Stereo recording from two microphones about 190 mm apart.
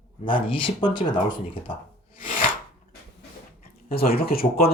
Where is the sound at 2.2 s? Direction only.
45° left (ahead or behind).